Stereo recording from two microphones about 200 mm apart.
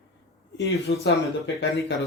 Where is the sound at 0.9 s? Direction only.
60° left (ahead or behind).